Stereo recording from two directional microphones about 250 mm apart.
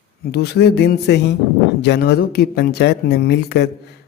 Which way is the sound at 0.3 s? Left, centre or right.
Left.